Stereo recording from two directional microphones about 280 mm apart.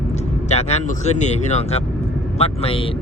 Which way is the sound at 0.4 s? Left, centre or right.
Left.